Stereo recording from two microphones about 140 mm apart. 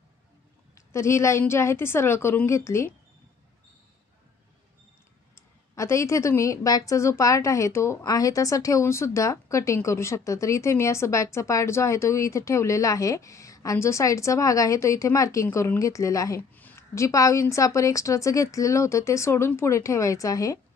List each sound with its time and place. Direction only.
0.7 s a woman's voice: 20° left (ahead or behind)
5.3 s a woman's voice: 20° left (ahead or behind)